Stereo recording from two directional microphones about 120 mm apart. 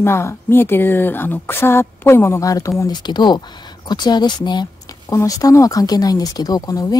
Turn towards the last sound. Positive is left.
turn(degrees=30)  # may be behind; listen again after turning